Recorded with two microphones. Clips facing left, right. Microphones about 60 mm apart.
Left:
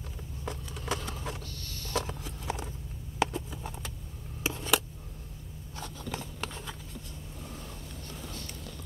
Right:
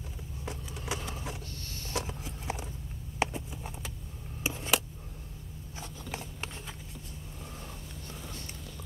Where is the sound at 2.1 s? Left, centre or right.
Centre.